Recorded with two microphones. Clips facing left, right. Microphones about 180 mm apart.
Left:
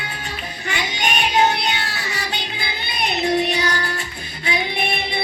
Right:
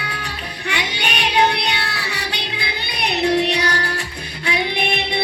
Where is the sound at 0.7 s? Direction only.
65° right (ahead or behind).